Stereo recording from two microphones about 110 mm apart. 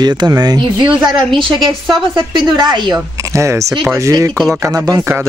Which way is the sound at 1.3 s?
50° right (ahead or behind).